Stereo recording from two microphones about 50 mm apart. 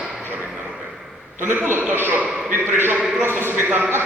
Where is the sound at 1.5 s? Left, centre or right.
Right.